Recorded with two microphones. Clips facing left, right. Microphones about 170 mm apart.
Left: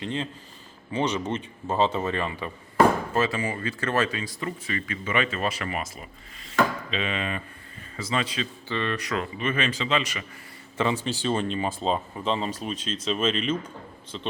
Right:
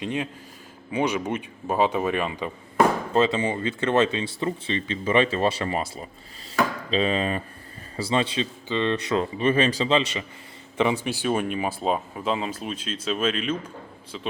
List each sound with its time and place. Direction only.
0.0 s speech: 15° right (ahead or behind)
8.6 s speech: 20° right (ahead or behind)
10.8 s speech: 15° right (ahead or behind)